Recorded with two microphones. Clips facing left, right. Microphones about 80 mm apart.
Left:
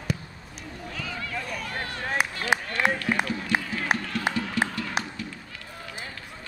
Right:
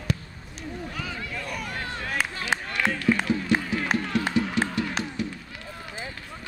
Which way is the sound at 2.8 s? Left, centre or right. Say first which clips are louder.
Left 2 dB; centre.